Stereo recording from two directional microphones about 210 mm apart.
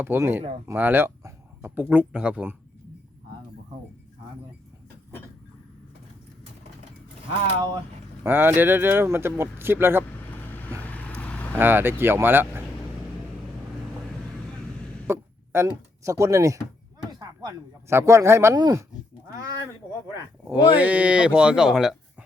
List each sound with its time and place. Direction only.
0.0 s speech: 10° right (ahead or behind)
8.2 s speech: 10° right (ahead or behind)
10.2 s vehicle: 10° left (ahead or behind)
11.5 s speech: 10° right (ahead or behind)
15.0 s speech: 10° right (ahead or behind)
20.5 s speech: 5° right (ahead or behind)